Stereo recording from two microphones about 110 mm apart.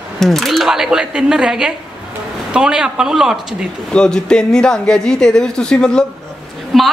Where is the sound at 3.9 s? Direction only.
5° left (ahead or behind).